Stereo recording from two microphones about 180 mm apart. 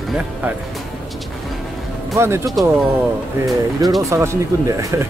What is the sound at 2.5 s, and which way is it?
Speech, centre (ahead or behind).